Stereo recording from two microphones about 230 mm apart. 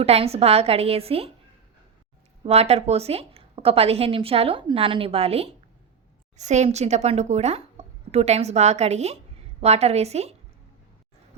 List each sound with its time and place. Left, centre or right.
0.0 s a woman's voice: right
2.4 s a woman's voice: right